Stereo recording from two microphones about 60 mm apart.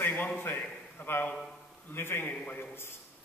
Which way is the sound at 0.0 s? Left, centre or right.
Left.